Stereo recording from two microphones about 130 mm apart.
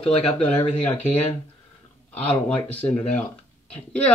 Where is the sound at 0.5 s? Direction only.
10° left (ahead or behind).